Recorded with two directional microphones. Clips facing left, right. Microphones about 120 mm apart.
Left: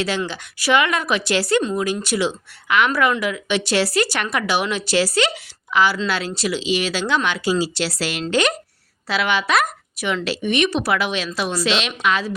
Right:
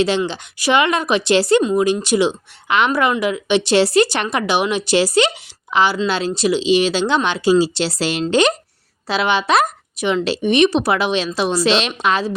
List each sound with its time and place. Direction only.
0.0 s speech: 20° right (ahead or behind)